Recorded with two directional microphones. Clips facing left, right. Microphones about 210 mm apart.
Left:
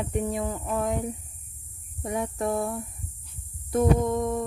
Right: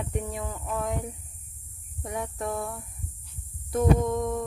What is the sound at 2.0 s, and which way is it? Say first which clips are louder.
Speech: left 4 dB; 5° left (ahead or behind).